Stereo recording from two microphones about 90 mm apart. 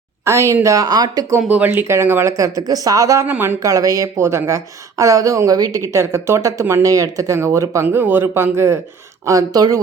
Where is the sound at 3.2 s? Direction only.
20° right (ahead or behind).